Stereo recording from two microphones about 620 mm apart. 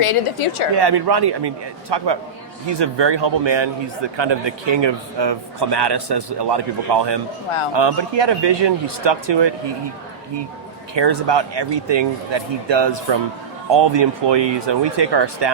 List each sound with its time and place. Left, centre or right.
0.0 s a woman's voice: left
0.7 s a man's voice: right
10.9 s a man's voice: right